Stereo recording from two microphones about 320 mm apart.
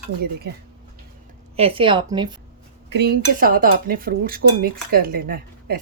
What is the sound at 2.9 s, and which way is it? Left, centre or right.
Speech, right.